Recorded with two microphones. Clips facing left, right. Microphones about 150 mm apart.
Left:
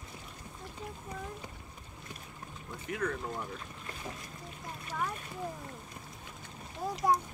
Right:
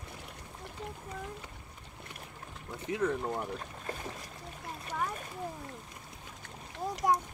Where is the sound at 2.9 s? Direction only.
25° right (ahead or behind).